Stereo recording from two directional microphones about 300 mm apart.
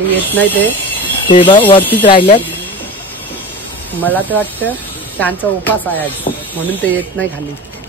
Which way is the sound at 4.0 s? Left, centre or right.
Centre.